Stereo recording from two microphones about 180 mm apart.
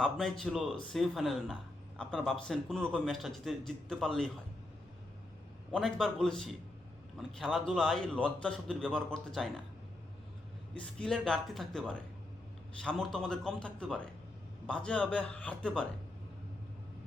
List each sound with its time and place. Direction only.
0.0 s a man's voice: centre (ahead or behind)
5.7 s a man's voice: centre (ahead or behind)
10.8 s a man's voice: 5° left (ahead or behind)